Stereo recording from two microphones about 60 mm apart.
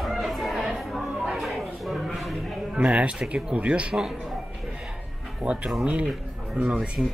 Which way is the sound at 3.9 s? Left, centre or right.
Centre.